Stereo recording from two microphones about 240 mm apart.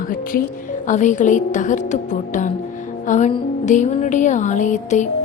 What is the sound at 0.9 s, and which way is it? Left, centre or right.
Speech, left.